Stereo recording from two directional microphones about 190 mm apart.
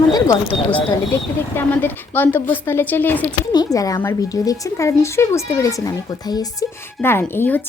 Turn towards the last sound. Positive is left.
turn(degrees=10)  # may be behind; listen again after turning